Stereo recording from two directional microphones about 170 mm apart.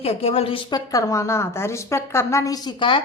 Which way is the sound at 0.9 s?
20° left (ahead or behind).